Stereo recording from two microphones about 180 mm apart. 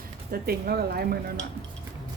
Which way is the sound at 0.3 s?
55° right (ahead or behind).